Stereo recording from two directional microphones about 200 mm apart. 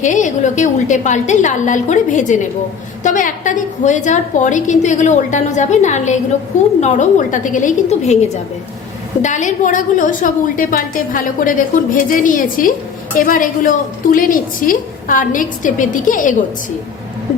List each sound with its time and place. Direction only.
0.0 s a woman's voice: 35° left (ahead or behind)
9.2 s a woman's voice: 40° left (ahead or behind)